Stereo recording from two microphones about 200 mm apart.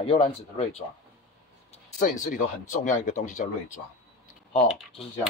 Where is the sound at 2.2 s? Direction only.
40° left (ahead or behind).